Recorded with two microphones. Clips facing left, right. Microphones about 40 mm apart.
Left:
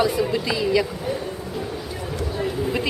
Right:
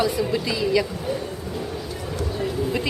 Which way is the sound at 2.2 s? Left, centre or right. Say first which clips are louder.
Even; centre.